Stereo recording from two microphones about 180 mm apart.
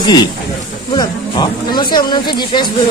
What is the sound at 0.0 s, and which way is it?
Speech, 25° left (ahead or behind).